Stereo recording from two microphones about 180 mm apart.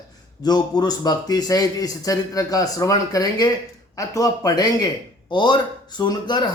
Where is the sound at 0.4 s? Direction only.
20° left (ahead or behind).